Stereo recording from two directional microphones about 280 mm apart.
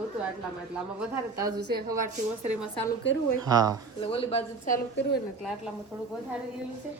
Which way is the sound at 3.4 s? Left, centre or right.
Centre.